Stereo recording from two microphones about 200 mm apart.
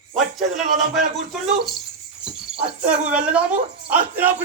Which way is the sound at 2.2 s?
5° right (ahead or behind).